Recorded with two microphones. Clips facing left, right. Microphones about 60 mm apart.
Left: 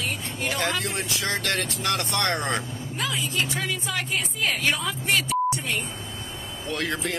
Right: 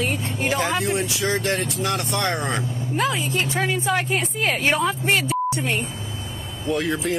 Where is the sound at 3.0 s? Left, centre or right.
Right.